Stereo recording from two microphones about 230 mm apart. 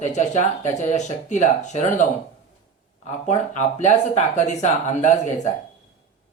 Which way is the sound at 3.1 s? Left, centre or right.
Left.